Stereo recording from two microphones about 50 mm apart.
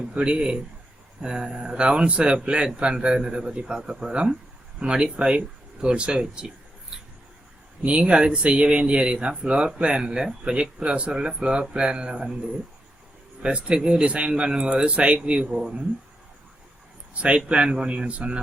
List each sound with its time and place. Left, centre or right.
0.1 s speech: right
6.9 s writing: centre
7.8 s speech: right
13.4 s speech: right
17.2 s speech: right